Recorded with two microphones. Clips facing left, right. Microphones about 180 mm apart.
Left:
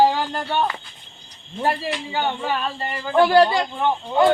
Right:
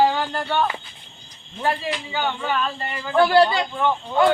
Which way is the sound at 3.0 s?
25° left (ahead or behind).